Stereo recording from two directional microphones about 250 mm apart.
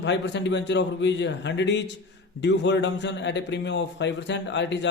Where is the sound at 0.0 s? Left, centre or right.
Left.